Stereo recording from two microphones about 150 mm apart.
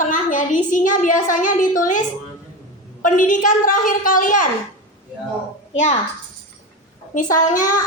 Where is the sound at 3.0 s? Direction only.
60° left (ahead or behind).